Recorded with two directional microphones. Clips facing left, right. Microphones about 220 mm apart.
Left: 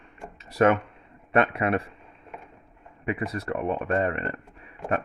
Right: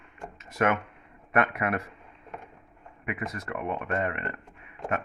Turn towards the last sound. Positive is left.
turn(degrees=35)  # may be behind; listen again after turning